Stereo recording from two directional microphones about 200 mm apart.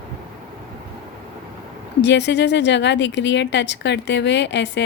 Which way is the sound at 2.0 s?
60° left (ahead or behind).